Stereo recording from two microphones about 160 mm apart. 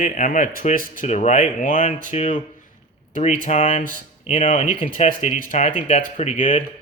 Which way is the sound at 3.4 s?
45° left (ahead or behind).